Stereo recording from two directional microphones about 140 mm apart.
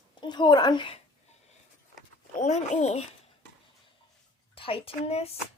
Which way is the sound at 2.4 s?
55° left (ahead or behind).